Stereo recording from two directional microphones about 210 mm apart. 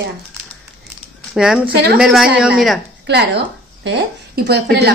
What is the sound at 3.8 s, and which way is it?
Speech, 55° right (ahead or behind).